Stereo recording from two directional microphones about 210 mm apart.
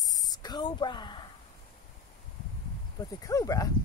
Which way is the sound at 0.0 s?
15° left (ahead or behind).